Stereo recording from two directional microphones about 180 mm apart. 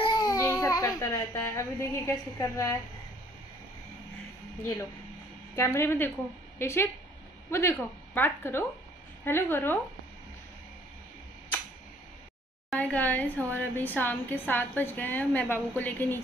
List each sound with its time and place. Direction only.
0.0 s speech: 20° left (ahead or behind)
5.6 s a woman's voice: 15° left (ahead or behind)
12.7 s a woman's voice: 10° left (ahead or behind)